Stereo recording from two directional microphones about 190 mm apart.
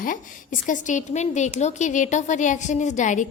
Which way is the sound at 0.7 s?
40° left (ahead or behind).